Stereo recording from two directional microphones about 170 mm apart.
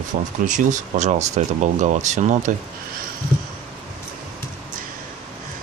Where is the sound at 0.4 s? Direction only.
45° right (ahead or behind).